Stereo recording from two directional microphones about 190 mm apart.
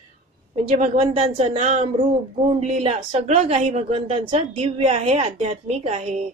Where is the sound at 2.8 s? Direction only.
30° right (ahead or behind).